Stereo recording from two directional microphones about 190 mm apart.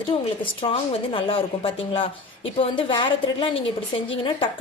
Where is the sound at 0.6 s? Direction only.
30° left (ahead or behind).